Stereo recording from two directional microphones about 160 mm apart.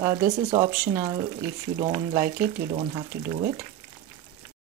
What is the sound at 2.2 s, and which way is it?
Speech, 70° right (ahead or behind).